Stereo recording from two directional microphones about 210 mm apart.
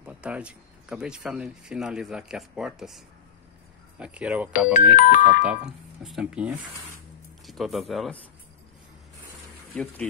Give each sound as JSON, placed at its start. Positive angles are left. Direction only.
{"t": 0.0, "sound": "speech", "side_deg": -5}
{"t": 4.0, "sound": "speech", "side_deg": -5}
{"t": 4.9, "sound": "speech", "side_deg": 40}
{"t": 5.4, "sound": "speech", "side_deg": -5}
{"t": 9.7, "sound": "speech", "side_deg": 5}